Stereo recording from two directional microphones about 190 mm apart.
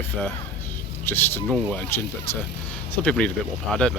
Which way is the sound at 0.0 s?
10° left (ahead or behind).